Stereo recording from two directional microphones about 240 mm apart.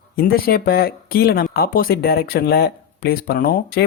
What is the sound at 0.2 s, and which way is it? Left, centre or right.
Speech, left.